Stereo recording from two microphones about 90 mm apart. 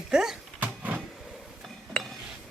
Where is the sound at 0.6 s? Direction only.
15° right (ahead or behind).